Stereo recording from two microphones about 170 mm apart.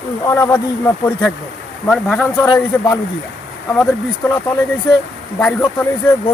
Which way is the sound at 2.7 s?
15° left (ahead or behind).